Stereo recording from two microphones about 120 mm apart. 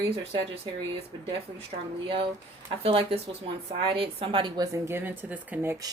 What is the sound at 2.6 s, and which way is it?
Speech, 50° right (ahead or behind).